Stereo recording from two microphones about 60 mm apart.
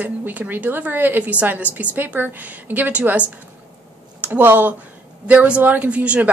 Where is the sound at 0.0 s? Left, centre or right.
Right.